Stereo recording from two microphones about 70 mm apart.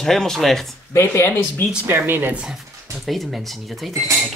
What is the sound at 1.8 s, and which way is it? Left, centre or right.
Speech, right.